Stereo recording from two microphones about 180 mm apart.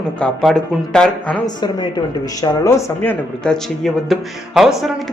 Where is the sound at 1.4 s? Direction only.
25° left (ahead or behind).